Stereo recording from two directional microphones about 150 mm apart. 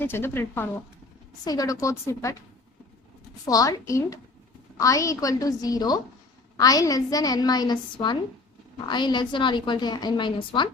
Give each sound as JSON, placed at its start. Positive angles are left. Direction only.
{"t": 0.0, "sound": "a woman's voice", "side_deg": 15}
{"t": 3.4, "sound": "a woman's voice", "side_deg": 25}